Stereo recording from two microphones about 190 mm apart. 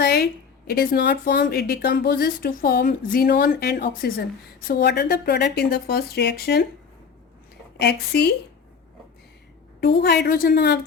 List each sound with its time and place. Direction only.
0.0 s a woman's voice: 60° left (ahead or behind)
7.8 s a woman's voice: 60° left (ahead or behind)
9.8 s a woman's voice: 60° left (ahead or behind)